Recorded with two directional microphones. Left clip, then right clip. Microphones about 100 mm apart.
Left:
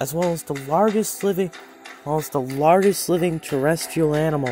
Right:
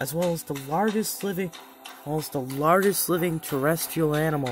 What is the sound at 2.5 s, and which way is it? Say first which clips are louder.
Speech: left 5 dB; 25° left (ahead or behind).